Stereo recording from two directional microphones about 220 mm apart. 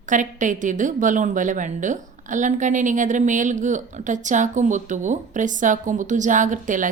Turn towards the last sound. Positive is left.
turn(degrees=-35)  # may be behind; listen again after turning